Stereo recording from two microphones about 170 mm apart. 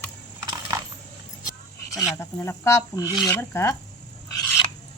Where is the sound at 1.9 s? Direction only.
20° left (ahead or behind).